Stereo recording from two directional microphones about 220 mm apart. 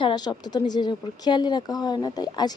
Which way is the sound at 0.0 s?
20° left (ahead or behind).